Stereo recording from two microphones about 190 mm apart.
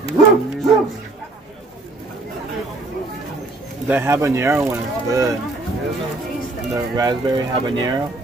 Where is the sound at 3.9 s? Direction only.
15° right (ahead or behind).